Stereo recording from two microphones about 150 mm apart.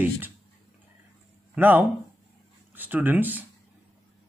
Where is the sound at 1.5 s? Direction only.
10° right (ahead or behind).